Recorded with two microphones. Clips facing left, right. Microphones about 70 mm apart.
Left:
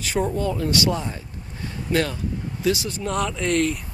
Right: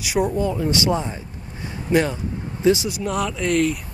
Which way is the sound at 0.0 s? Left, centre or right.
Centre.